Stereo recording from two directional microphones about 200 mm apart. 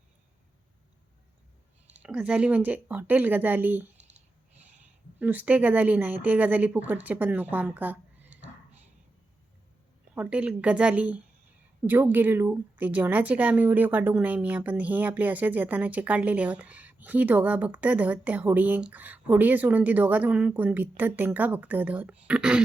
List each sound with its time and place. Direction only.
1.9 s a woman's voice: 5° right (ahead or behind)
3.9 s clicking: 35° right (ahead or behind)
5.2 s speech: 10° right (ahead or behind)
10.2 s a woman's voice: 5° right (ahead or behind)